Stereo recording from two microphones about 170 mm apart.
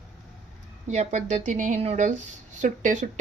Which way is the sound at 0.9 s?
45° right (ahead or behind).